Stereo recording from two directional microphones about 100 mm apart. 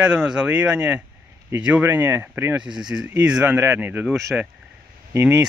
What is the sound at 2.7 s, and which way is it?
Speech, 5° right (ahead or behind).